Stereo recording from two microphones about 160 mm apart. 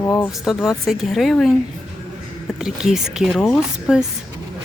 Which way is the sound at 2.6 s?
5° right (ahead or behind).